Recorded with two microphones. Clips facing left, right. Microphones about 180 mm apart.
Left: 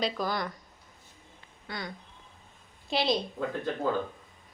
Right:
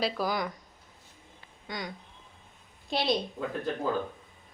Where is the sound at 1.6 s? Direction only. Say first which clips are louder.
Right 1 dB; 15° right (ahead or behind).